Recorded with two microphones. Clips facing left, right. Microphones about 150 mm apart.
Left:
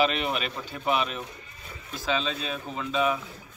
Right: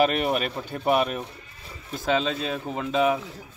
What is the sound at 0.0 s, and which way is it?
Speech, 50° right (ahead or behind).